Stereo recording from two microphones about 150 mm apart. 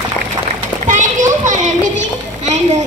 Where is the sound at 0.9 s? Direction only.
55° right (ahead or behind).